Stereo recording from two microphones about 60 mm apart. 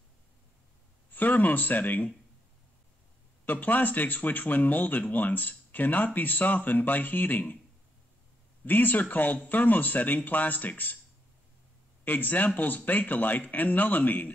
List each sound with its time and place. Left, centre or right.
1.1 s speech: left
3.4 s speech: left
8.6 s speech: left
12.0 s speech: left